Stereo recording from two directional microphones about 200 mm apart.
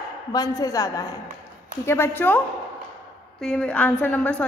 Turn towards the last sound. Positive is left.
turn(degrees=5)  # may be behind; listen again after turning